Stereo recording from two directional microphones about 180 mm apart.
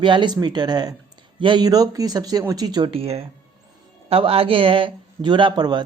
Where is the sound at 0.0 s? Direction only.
25° right (ahead or behind).